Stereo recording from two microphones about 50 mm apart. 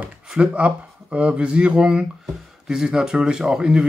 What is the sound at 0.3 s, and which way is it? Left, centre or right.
Speech, right.